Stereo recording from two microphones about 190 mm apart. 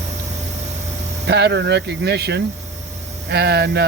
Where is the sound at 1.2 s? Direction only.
65° right (ahead or behind).